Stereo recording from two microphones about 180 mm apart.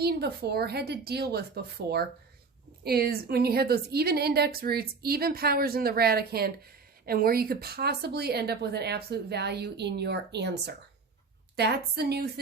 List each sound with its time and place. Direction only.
0.0 s a woman's voice: 65° right (ahead or behind)